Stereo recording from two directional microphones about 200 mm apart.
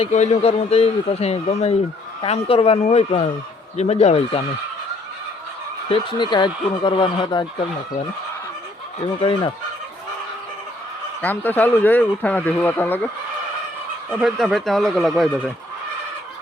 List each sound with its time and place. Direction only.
0.0 s speech: 35° left (ahead or behind)
5.9 s speech: 25° left (ahead or behind)
11.2 s speech: 10° left (ahead or behind)
14.1 s speech: 5° right (ahead or behind)